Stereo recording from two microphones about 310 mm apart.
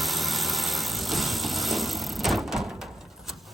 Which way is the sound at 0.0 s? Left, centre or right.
Centre.